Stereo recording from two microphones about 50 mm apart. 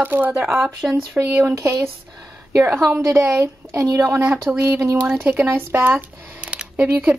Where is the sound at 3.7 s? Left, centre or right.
Right.